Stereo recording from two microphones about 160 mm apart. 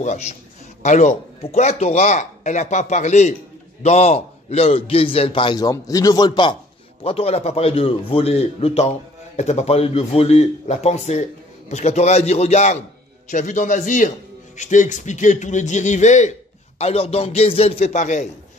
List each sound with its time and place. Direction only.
0.0 s a man's voice: 45° left (ahead or behind); by 6.5 s 25° left (ahead or behind)
7.0 s a man's voice: 35° left (ahead or behind)